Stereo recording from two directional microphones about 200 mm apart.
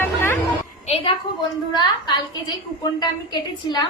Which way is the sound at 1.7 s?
20° left (ahead or behind).